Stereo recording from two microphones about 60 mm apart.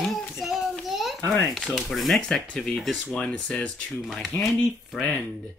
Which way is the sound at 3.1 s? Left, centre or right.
Centre.